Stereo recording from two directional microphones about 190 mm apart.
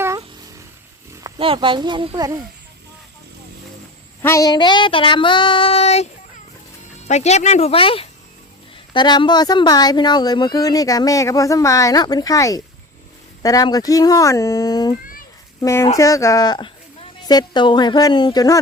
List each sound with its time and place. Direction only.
1.2 s speech: 25° right (ahead or behind)
4.2 s speech: 15° left (ahead or behind); by 6.1 s 35° left (ahead or behind)
7.1 s speech: 35° left (ahead or behind); by 18.6 s 20° left (ahead or behind)